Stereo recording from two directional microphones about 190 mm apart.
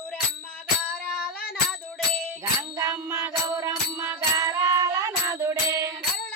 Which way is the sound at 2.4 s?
15° right (ahead or behind).